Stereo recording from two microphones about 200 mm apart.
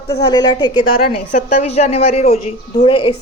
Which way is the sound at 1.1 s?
35° left (ahead or behind).